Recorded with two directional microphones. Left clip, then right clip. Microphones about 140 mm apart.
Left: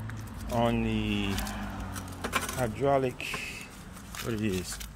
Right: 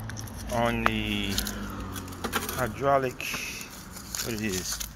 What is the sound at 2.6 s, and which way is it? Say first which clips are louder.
Speech: right 3 dB; 50° left (ahead or behind).